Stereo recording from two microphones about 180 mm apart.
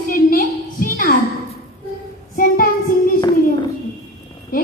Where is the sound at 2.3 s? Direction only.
50° left (ahead or behind).